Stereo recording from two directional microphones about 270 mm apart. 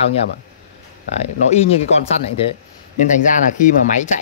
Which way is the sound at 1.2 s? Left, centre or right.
Left.